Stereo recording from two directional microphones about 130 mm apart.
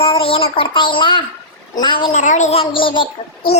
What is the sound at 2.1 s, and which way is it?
Speech, 70° left (ahead or behind).